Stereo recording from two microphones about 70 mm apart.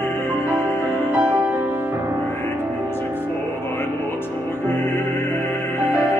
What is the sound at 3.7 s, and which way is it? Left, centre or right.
Music, left.